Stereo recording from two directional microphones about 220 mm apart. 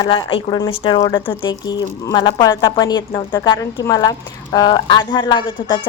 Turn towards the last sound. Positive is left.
turn(degrees=20)  # may be behind; listen again after turning